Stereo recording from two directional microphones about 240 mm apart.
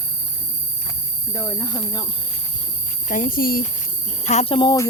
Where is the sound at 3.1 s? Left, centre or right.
Left; by 4.9 s centre.